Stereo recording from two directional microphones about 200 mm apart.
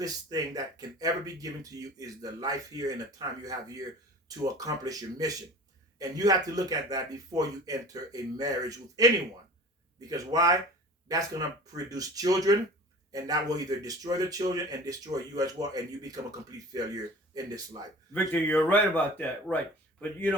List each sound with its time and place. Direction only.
0.0 s a man's voice: 20° right (ahead or behind)
10.1 s a man's voice: 15° right (ahead or behind)
18.1 s a man's voice: 5° left (ahead or behind)